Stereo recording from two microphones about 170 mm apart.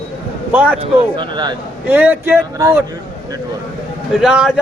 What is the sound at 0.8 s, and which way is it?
Speech, 25° right (ahead or behind).